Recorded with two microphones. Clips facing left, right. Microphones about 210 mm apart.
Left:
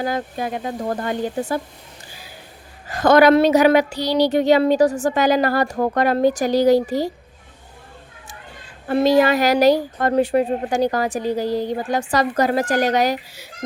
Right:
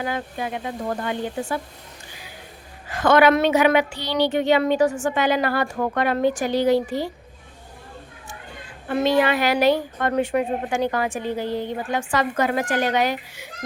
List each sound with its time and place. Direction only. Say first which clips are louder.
0.0 s a woman's voice: left 4 dB; 40° left (ahead or behind)
2.9 s a woman's voice: left 4 dB; 40° left (ahead or behind)
8.9 s a woman's voice: left 4 dB; 40° left (ahead or behind)